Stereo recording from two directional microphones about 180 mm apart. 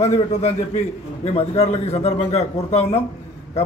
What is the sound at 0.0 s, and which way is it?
A man's voice, 35° left (ahead or behind).